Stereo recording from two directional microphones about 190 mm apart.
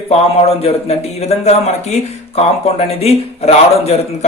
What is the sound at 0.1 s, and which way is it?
A man's voice, 35° left (ahead or behind).